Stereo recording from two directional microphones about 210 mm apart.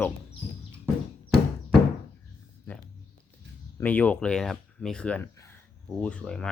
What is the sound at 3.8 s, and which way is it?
Speech, 5° left (ahead or behind).